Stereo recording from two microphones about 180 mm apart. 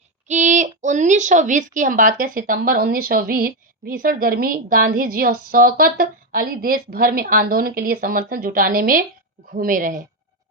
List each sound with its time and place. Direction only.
0.3 s a woman's voice: 40° right (ahead or behind)